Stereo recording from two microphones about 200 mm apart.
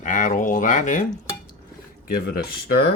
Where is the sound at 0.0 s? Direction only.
40° left (ahead or behind).